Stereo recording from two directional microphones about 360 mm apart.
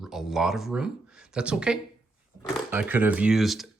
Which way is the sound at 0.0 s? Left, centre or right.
Centre.